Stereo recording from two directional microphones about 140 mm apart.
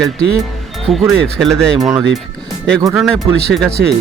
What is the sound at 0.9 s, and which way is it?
Speech, centre (ahead or behind).